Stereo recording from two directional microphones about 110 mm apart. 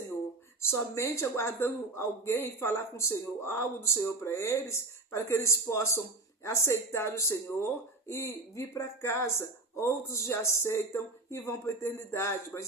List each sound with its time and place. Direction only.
0.6 s speech: 25° left (ahead or behind)